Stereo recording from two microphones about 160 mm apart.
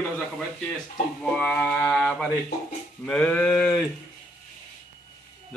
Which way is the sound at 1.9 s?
Centre (ahead or behind).